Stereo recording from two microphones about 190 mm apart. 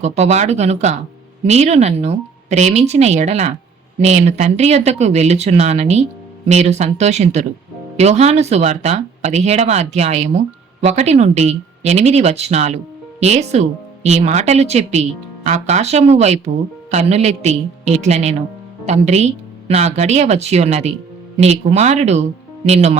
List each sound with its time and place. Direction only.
0.0 s speech: 35° right (ahead or behind)